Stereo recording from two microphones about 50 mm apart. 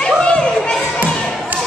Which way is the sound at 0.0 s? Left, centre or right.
Left.